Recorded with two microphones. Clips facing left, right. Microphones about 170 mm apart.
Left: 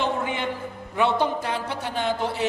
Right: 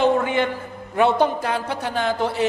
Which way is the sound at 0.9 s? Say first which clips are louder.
Right 5 dB; 45° right (ahead or behind).